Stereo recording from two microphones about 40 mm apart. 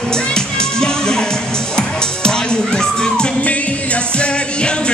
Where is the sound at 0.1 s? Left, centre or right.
Centre.